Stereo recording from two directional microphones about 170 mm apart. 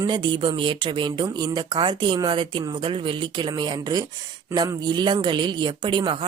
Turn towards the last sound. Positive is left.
turn(degrees=-30)  # may be behind; listen again after turning